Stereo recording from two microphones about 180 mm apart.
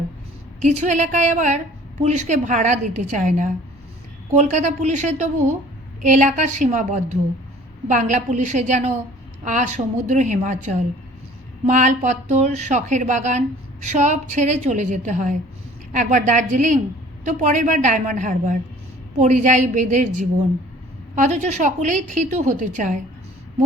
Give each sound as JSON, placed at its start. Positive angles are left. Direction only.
{"t": 0.6, "sound": "a woman's voice", "side_deg": -40}